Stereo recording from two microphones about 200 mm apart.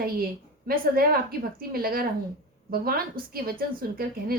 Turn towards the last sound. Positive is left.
turn(degrees=-50)  # may be behind; listen again after turning